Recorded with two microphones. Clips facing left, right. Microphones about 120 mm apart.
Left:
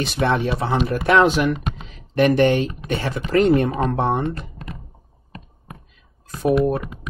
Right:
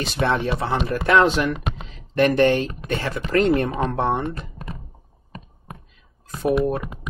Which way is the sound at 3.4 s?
30° left (ahead or behind).